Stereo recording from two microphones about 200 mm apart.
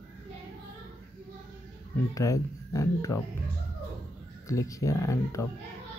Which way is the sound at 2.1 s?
15° left (ahead or behind).